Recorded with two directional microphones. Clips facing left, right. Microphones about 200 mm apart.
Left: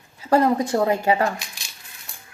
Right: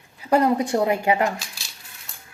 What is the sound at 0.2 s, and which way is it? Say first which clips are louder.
A woman's voice: left 1 dB; 15° right (ahead or behind).